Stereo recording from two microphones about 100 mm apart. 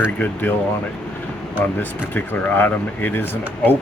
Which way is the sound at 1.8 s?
20° left (ahead or behind).